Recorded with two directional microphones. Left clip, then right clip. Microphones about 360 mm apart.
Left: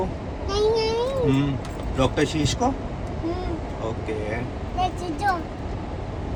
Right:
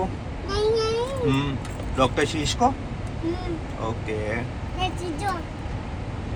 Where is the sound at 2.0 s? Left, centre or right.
Centre.